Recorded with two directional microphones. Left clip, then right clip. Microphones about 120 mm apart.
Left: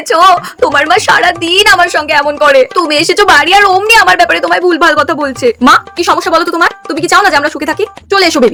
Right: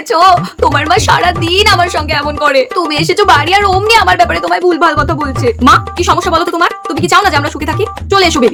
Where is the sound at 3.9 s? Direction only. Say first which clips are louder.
Left 2 dB; 30° left (ahead or behind).